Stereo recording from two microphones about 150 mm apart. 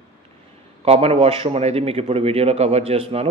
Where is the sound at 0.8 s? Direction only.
40° right (ahead or behind).